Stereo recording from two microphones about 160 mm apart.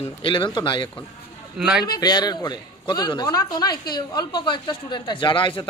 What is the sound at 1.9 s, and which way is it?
Speech, 25° left (ahead or behind).